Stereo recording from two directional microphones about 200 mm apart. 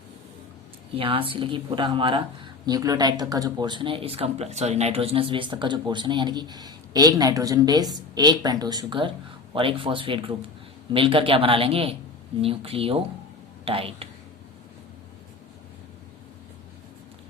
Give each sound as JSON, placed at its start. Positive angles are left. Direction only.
{"t": 0.9, "sound": "a woman's voice", "side_deg": -25}